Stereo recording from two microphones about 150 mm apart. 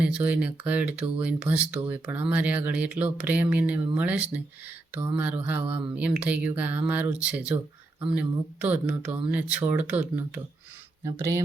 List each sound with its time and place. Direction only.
0.0 s speech: 10° right (ahead or behind)